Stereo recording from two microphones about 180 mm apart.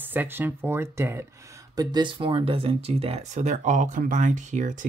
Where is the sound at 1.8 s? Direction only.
25° right (ahead or behind).